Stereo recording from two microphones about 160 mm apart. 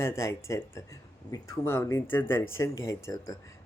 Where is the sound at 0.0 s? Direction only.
15° left (ahead or behind).